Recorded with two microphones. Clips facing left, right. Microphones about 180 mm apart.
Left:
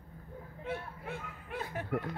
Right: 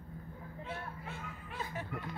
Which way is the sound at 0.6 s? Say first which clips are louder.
Left 4 dB; 60° left (ahead or behind).